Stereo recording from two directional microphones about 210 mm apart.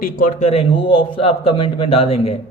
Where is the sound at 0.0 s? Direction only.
40° left (ahead or behind).